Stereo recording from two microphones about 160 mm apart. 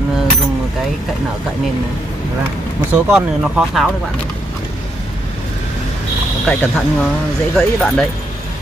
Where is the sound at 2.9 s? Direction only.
10° right (ahead or behind).